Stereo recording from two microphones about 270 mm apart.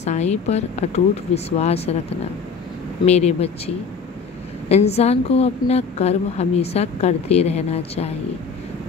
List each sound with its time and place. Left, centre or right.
0.0 s a woman's voice: left
3.1 s a woman's voice: left